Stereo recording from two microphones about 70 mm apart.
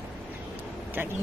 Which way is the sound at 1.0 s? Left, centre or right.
Right.